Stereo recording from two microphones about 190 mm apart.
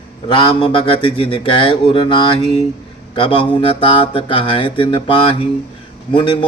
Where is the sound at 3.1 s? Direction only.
25° left (ahead or behind).